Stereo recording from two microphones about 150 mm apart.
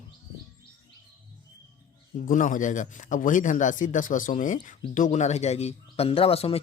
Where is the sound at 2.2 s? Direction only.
65° left (ahead or behind); by 6.6 s 40° left (ahead or behind).